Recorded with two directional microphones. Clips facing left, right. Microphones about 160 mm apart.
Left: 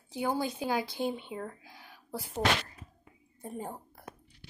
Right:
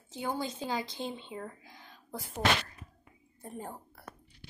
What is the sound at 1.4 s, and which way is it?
Whispering, 10° left (ahead or behind).